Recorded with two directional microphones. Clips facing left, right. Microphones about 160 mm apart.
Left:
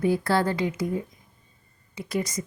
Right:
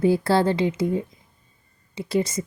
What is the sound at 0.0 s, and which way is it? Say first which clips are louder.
Speech: right 4 dB; 30° right (ahead or behind).